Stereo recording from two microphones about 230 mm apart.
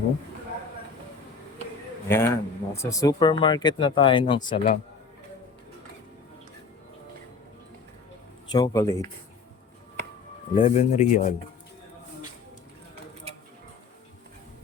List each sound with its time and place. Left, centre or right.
2.0 s speech: centre
4.4 s speech: left
8.5 s speech: centre
10.5 s speech: left